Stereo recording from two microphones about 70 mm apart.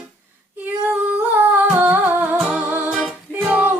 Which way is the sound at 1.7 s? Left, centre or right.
Right.